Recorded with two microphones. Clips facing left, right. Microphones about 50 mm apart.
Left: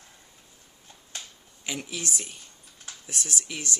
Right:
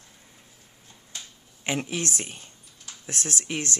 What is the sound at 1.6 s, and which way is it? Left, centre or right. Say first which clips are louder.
Speech: right 5 dB; right.